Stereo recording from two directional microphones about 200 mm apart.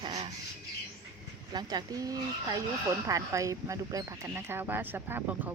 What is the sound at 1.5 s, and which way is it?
Speech, 20° right (ahead or behind).